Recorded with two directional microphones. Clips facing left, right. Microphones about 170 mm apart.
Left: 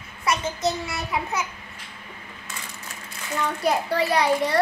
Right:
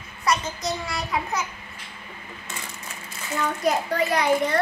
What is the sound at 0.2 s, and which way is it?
Child singing, 25° left (ahead or behind).